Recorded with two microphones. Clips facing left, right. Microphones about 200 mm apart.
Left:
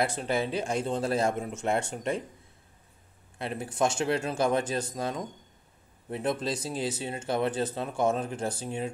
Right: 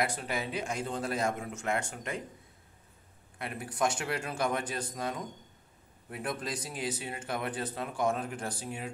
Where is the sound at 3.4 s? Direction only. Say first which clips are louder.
Left 4 dB; 25° left (ahead or behind).